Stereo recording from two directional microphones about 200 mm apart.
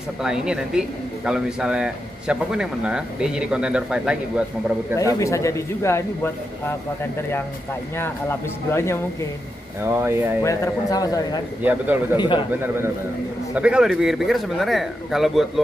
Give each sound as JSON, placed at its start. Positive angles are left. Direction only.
{"t": 0.2, "sound": "speech", "side_deg": -5}
{"t": 5.2, "sound": "speech", "side_deg": 15}
{"t": 9.8, "sound": "a man's voice", "side_deg": -10}
{"t": 10.4, "sound": "speech", "side_deg": 15}
{"t": 11.6, "sound": "a man's voice", "side_deg": -10}
{"t": 12.2, "sound": "a man's voice", "side_deg": 25}
{"t": 13.6, "sound": "speech", "side_deg": -5}